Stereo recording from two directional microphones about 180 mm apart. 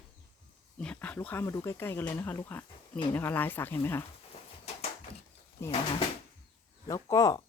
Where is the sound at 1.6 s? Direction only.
15° left (ahead or behind).